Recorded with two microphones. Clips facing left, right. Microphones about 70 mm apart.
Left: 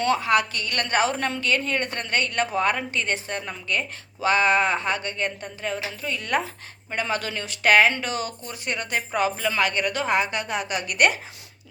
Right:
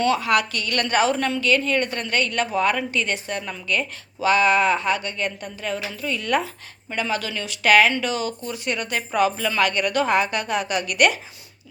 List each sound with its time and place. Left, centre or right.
0.0 s a woman's voice: left